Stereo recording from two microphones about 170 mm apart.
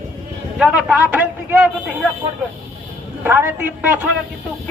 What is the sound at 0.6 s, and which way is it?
A man's voice, 5° right (ahead or behind).